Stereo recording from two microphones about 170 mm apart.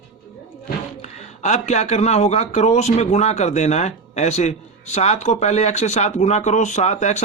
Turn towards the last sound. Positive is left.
turn(degrees=45)  # may be behind; listen again after turning